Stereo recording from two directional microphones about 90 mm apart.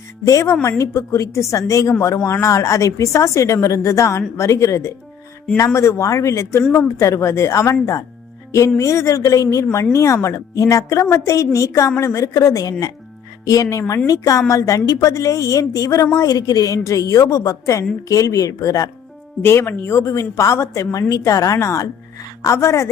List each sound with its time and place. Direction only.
0.3 s a woman's voice: 35° left (ahead or behind)
19.4 s a woman's voice: 25° left (ahead or behind)